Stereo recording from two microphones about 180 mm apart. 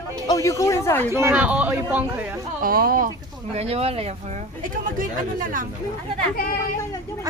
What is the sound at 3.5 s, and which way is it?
Speech, 35° right (ahead or behind).